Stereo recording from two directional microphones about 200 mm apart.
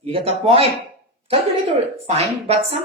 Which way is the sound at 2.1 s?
30° right (ahead or behind).